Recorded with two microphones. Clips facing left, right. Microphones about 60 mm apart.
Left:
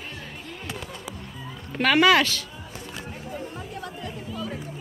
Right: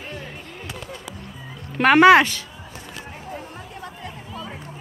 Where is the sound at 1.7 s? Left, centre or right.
Right.